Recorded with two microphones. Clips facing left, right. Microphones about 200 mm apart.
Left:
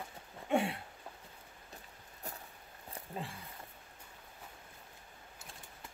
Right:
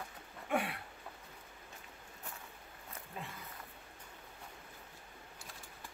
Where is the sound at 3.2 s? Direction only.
35° left (ahead or behind).